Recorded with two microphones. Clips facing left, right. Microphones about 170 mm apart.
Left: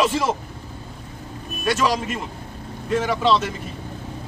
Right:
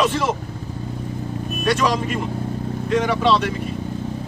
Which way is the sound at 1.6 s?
5° left (ahead or behind).